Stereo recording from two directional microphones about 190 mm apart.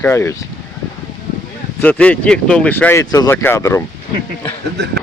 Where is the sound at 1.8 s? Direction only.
10° left (ahead or behind).